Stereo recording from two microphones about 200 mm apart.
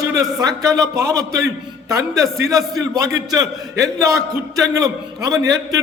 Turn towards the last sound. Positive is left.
turn(degrees=-15)  # may be behind; listen again after turning